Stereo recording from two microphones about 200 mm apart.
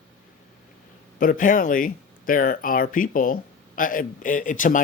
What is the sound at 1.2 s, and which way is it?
Speech, 40° left (ahead or behind).